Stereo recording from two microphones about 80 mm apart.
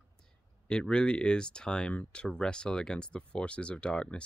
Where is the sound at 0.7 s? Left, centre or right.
Centre.